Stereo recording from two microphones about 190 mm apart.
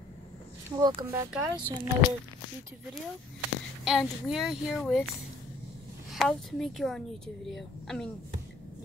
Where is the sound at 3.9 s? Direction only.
Centre (ahead or behind).